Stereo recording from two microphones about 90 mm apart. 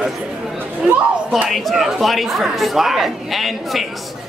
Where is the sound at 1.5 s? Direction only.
Centre (ahead or behind).